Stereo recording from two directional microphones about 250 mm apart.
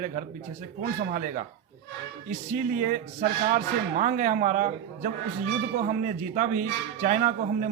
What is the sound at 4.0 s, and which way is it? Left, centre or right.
Speech, right.